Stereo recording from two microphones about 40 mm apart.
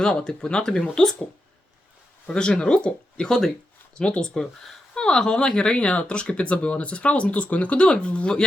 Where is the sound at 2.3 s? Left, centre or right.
Left.